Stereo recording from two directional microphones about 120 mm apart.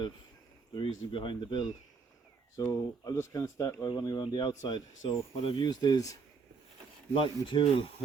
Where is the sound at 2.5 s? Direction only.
30° left (ahead or behind).